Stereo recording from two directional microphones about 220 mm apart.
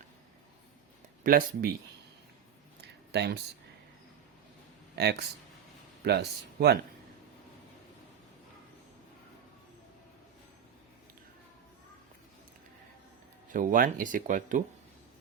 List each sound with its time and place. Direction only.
1.2 s speech: 40° right (ahead or behind)
2.8 s a sound: 50° right (ahead or behind)
5.0 s speech: 45° right (ahead or behind)
13.5 s speech: 35° right (ahead or behind)